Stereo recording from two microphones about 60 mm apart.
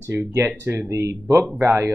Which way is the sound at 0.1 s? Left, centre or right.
Right.